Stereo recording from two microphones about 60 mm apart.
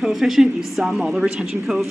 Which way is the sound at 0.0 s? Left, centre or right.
Centre.